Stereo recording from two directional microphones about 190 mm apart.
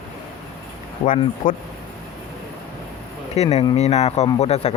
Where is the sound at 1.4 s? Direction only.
45° left (ahead or behind).